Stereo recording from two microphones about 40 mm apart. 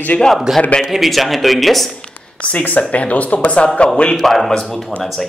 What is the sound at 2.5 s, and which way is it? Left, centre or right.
Speech, left.